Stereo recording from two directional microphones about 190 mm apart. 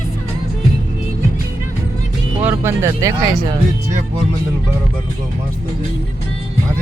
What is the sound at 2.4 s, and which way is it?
Speech, 15° right (ahead or behind).